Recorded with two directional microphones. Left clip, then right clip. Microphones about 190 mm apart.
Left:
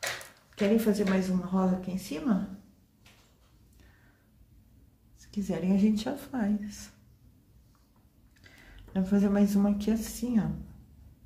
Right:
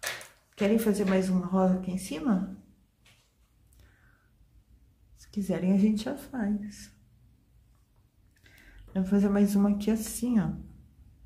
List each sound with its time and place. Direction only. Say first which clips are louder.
0.6 s a woman's voice: even; 20° right (ahead or behind)
5.2 s speech: right 2 dB; 20° right (ahead or behind); by 6.5 s 10° left (ahead or behind)
8.5 s speech: left 2 dB; 5° left (ahead or behind); by 10.5 s 20° right (ahead or behind)